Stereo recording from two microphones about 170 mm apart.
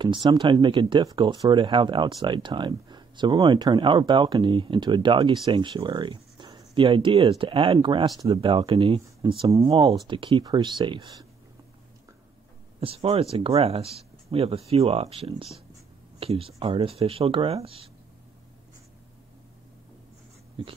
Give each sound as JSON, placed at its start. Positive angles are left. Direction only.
{"t": 0.0, "sound": "speech", "side_deg": -25}
{"t": 12.8, "sound": "speech", "side_deg": -35}
{"t": 20.6, "sound": "speech", "side_deg": -30}